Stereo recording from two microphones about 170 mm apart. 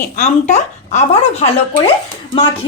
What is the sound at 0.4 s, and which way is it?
Speech, 40° left (ahead or behind).